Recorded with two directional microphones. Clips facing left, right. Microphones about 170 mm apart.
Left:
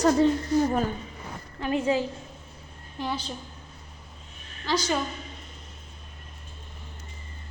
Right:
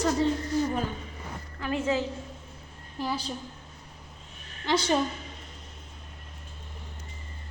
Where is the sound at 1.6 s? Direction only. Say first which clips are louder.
Left 3 dB; 15° left (ahead or behind).